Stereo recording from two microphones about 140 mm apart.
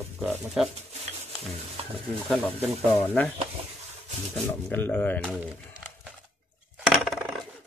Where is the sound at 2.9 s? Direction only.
10° left (ahead or behind).